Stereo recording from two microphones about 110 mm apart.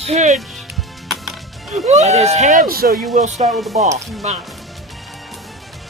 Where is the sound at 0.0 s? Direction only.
85° right.